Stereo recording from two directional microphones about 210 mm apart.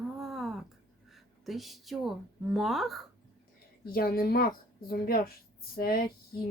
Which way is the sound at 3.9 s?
45° left (ahead or behind).